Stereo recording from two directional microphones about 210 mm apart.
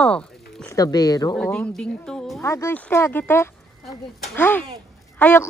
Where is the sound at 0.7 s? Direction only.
15° left (ahead or behind).